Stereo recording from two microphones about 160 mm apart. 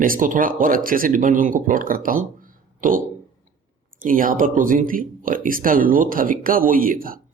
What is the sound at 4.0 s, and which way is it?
Speech, 60° right (ahead or behind).